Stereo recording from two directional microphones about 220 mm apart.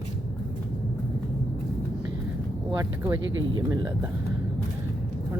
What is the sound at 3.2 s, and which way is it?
Speech, 60° right (ahead or behind).